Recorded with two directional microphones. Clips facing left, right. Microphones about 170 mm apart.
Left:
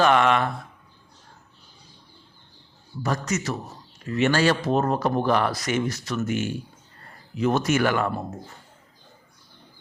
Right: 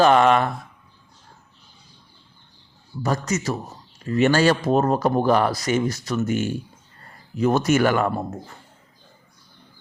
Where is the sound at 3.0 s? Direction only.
35° right (ahead or behind).